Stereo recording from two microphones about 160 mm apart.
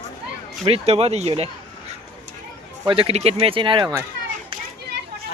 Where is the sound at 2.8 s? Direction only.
35° right (ahead or behind).